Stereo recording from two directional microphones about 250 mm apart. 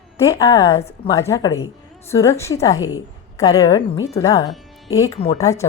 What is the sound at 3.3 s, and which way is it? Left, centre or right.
A woman's voice, centre.